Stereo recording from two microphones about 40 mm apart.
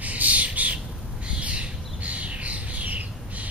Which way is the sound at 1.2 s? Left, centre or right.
Right.